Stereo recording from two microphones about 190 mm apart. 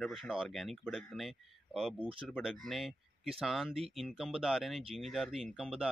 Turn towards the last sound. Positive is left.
turn(degrees=-5)  # may be behind; listen again after turning